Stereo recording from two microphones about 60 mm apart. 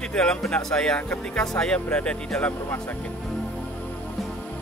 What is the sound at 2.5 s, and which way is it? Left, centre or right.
Speech, left.